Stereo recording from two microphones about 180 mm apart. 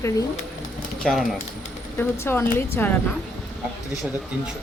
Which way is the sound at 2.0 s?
10° left (ahead or behind).